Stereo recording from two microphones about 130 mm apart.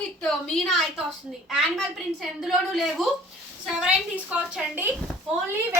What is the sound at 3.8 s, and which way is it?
A woman's voice, 10° right (ahead or behind).